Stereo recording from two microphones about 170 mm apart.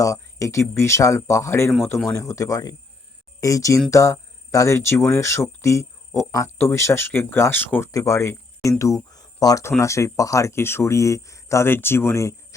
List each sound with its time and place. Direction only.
0.0 s speech: 20° left (ahead or behind)